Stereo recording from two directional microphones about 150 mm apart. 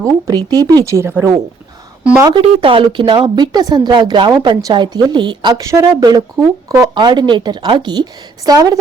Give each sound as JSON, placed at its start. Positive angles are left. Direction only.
{"t": 0.0, "sound": "a woman's voice", "side_deg": -25}
{"t": 2.3, "sound": "speech", "side_deg": -35}